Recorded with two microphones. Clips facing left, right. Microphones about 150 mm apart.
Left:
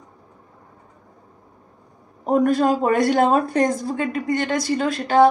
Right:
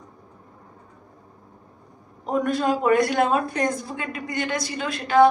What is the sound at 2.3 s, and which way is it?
Speech, 40° left (ahead or behind).